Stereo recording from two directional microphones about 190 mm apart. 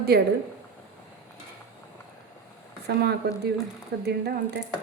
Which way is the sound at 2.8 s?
60° right (ahead or behind).